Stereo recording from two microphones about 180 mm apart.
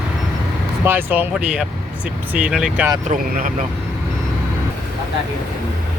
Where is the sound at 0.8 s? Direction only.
10° right (ahead or behind).